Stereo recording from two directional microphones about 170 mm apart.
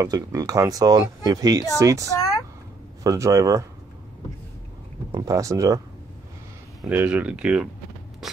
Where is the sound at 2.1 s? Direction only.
20° left (ahead or behind).